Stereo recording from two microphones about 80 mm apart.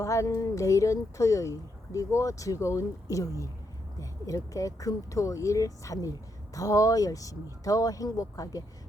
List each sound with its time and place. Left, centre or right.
0.0 s speech: left